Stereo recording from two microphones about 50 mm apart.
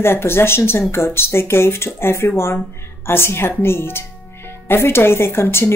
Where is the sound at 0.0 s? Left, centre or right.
Left.